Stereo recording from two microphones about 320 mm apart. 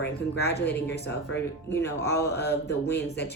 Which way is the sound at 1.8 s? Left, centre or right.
Left.